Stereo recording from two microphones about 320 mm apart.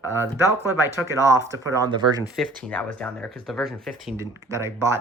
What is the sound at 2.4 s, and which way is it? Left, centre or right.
Speech, centre.